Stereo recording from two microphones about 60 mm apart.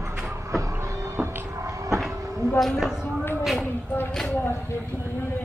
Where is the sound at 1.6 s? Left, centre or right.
Right.